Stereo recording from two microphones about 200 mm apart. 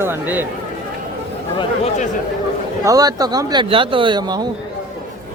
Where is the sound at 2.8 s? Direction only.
20° right (ahead or behind).